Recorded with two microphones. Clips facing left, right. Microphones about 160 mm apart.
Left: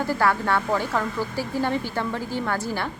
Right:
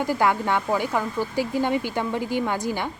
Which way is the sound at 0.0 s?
15° right (ahead or behind).